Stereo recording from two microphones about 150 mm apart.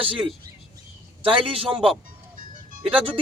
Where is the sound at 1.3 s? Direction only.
40° right (ahead or behind).